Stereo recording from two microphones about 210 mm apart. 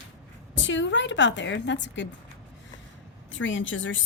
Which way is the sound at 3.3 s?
65° left (ahead or behind).